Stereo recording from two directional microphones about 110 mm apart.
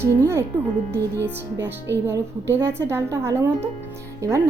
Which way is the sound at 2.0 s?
20° right (ahead or behind).